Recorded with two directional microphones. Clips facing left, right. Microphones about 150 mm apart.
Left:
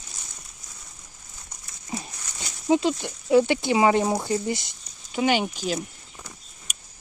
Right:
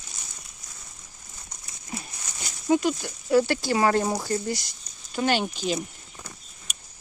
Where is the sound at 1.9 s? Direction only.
25° left (ahead or behind).